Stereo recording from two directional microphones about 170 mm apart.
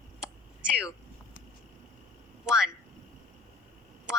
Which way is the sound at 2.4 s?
5° right (ahead or behind).